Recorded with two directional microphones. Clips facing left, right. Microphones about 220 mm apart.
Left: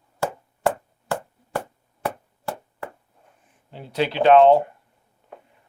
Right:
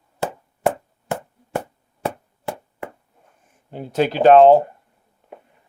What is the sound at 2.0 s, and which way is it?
Chop, 20° right (ahead or behind).